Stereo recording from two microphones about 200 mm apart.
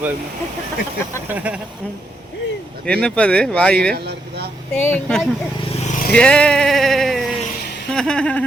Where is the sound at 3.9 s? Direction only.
55° right (ahead or behind).